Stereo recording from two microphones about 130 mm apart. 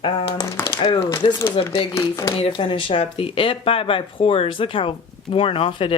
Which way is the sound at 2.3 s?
45° left (ahead or behind).